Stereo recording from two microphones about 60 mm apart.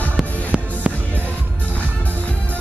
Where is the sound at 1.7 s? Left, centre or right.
Left.